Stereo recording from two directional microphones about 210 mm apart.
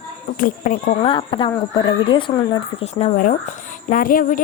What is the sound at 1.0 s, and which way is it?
Speech, 25° left (ahead or behind).